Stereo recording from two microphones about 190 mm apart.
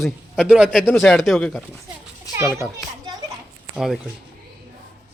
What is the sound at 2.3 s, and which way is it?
Speech, 20° left (ahead or behind).